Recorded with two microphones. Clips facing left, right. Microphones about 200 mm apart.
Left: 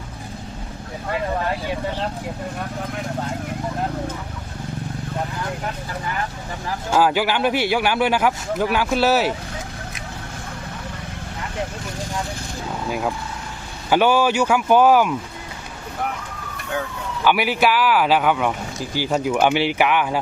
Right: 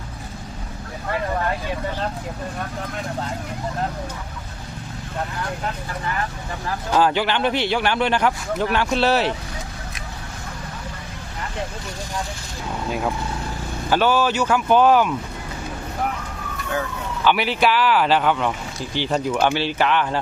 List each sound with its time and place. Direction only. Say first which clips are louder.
6.9 s a man's voice: left 1 dB; 5° left (ahead or behind)
13.9 s a man's voice: left 2 dB; 15° left (ahead or behind)
17.2 s a man's voice: left 1 dB; 10° left (ahead or behind)